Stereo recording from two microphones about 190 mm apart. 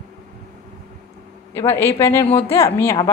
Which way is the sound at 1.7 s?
15° left (ahead or behind).